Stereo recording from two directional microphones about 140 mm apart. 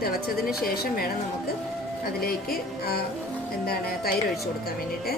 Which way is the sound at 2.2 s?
90° left.